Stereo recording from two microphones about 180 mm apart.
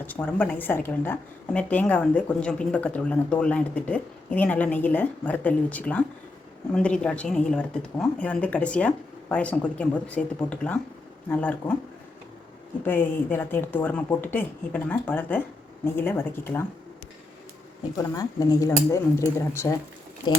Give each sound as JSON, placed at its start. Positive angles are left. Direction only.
{"t": 0.0, "sound": "speech", "side_deg": 10}
{"t": 12.8, "sound": "speech", "side_deg": 10}
{"t": 17.9, "sound": "speech", "side_deg": 20}